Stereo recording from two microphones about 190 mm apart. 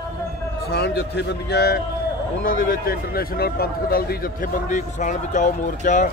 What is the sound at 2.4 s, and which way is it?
A man's voice, 50° left (ahead or behind).